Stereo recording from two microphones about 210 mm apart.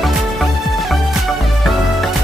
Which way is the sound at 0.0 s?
Centre (ahead or behind).